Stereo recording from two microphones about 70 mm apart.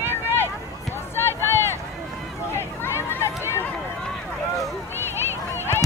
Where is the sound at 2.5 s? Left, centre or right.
Left.